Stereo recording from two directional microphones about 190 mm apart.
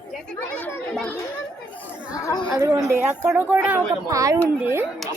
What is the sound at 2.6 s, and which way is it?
A woman's voice, 10° right (ahead or behind).